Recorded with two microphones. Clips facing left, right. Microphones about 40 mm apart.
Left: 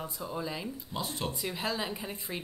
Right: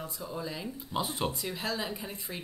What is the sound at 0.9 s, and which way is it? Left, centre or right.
Speech, centre.